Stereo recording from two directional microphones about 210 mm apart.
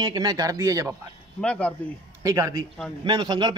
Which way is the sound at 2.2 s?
15° right (ahead or behind).